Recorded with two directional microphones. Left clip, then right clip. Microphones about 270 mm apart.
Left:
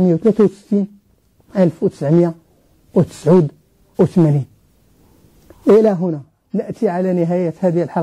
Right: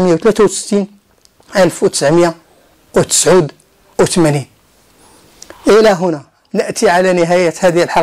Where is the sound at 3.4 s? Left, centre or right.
Right.